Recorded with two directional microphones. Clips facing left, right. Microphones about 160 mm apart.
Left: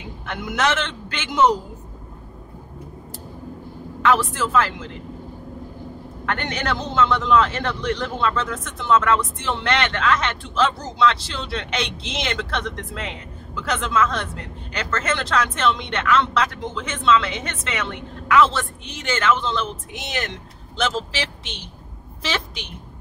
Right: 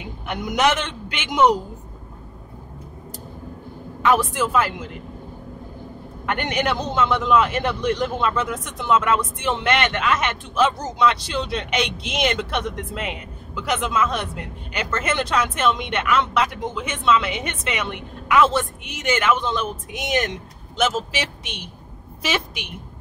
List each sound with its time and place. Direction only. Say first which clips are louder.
0.0 s a man's voice: right 2 dB; 15° right (ahead or behind)
4.1 s a man's voice: right 1 dB; 15° right (ahead or behind)
6.2 s a man's voice: right 3 dB; 15° right (ahead or behind)